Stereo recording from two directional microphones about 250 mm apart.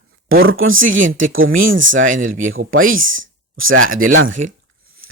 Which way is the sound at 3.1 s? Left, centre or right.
Right.